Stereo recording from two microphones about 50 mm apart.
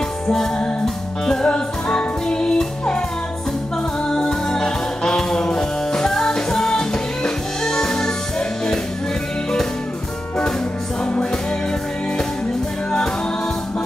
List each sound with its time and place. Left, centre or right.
1.2 s music: centre
4.1 s music: centre